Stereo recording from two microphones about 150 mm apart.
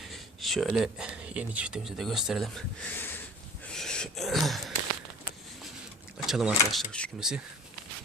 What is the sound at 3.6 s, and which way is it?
Wheeze, 5° left (ahead or behind).